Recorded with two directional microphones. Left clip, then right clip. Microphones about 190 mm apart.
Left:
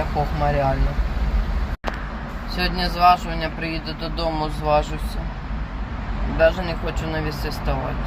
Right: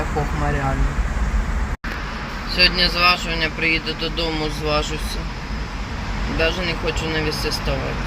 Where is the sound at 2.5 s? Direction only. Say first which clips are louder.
Right 7 dB; 15° left (ahead or behind).